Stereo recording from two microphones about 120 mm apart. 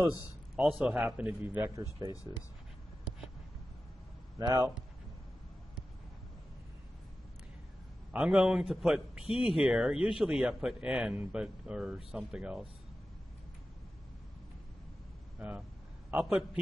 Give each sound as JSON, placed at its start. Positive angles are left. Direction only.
{"t": 0.6, "sound": "a man's voice", "side_deg": -5}
{"t": 2.0, "sound": "speech", "side_deg": -30}
{"t": 4.4, "sound": "speech", "side_deg": -25}
{"t": 8.1, "sound": "speech", "side_deg": -10}
{"t": 15.3, "sound": "a man's voice", "side_deg": -10}